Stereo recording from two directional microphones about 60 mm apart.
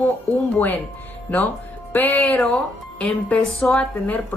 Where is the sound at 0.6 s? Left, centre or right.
Left.